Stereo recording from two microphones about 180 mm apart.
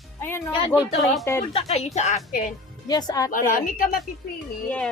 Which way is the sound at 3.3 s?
45° left (ahead or behind).